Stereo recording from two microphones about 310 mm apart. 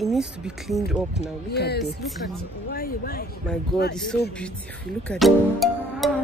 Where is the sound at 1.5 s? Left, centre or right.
Left.